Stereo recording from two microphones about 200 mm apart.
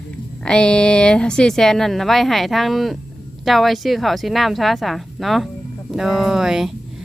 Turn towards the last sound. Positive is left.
turn(degrees=0)  # may be behind; listen again after turning